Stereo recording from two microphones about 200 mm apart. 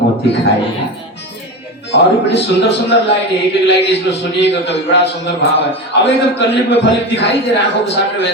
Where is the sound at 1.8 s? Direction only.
60° left (ahead or behind).